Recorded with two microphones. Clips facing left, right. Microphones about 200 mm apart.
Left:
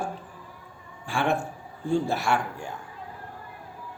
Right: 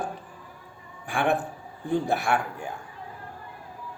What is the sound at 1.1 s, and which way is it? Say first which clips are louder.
A man's voice: right 1 dB; 15° right (ahead or behind).